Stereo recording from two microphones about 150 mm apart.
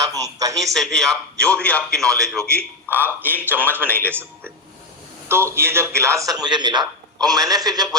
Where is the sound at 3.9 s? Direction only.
15° right (ahead or behind).